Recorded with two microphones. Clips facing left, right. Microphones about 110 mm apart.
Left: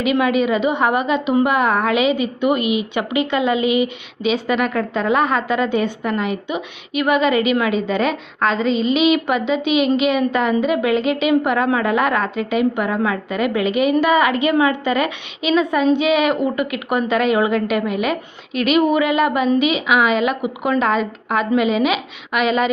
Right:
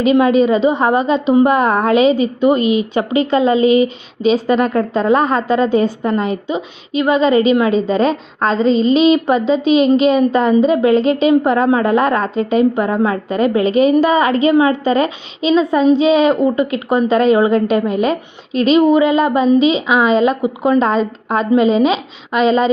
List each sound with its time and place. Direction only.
0.0 s a woman's voice: 30° right (ahead or behind)